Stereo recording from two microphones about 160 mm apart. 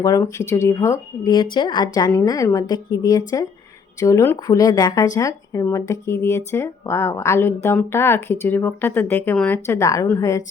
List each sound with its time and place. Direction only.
0.0 s speech: 20° left (ahead or behind)